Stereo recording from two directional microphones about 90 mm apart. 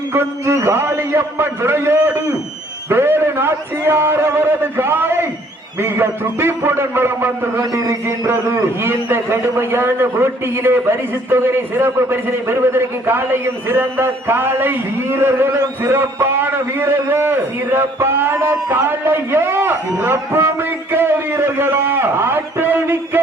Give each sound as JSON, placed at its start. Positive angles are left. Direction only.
{"t": 0.1, "sound": "a man's voice", "side_deg": -30}
{"t": 8.8, "sound": "a man's voice", "side_deg": -25}